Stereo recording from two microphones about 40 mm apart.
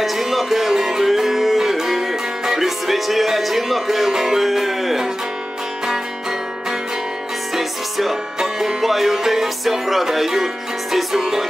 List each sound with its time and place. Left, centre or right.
0.0 s music: centre
7.5 s music: centre